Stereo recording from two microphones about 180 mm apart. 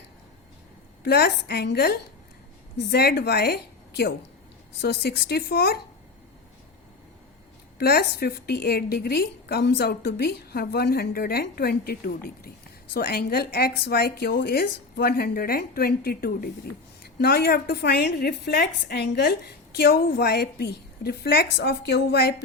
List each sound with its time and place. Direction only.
1.0 s a woman's voice: 65° left (ahead or behind)
7.8 s a woman's voice: 60° left (ahead or behind)